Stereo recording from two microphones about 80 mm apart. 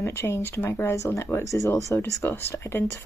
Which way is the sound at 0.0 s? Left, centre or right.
Left.